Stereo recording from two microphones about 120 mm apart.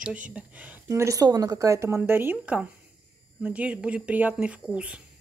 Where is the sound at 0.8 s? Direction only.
25° right (ahead or behind); by 5.0 s 10° right (ahead or behind).